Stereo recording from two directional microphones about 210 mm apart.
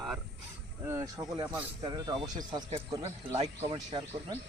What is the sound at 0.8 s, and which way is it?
Speech, 15° right (ahead or behind).